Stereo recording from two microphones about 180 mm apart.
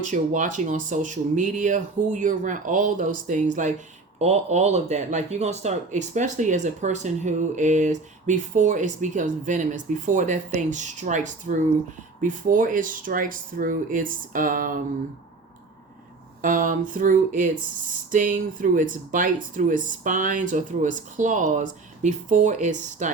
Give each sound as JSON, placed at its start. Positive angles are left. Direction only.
{"t": 0.0, "sound": "speech", "side_deg": -45}
{"t": 16.4, "sound": "speech", "side_deg": -50}